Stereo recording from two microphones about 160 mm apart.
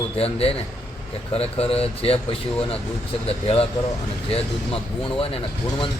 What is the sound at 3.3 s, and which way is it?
Speech, 35° left (ahead or behind).